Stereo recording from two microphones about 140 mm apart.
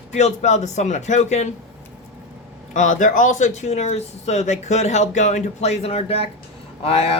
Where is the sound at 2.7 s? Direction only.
65° left (ahead or behind).